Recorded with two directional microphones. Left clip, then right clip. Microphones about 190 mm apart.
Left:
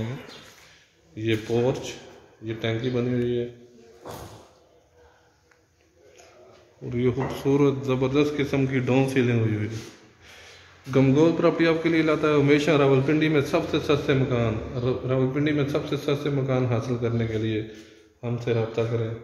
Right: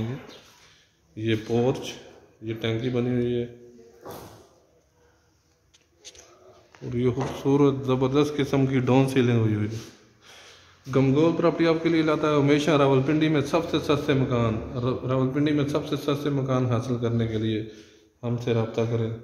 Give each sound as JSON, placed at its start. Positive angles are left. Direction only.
{"t": 1.1, "sound": "a man's voice", "side_deg": -10}
{"t": 6.9, "sound": "a man's voice", "side_deg": -5}
{"t": 10.9, "sound": "a man's voice", "side_deg": 0}